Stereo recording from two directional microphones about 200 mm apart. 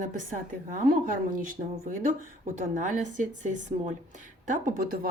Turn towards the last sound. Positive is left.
turn(degrees=-40)  # may be behind; listen again after turning